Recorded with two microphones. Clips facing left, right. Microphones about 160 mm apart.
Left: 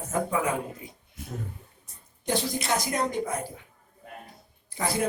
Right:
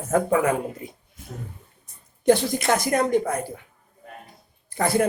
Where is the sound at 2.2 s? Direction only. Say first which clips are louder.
Right 9 dB; 60° right (ahead or behind).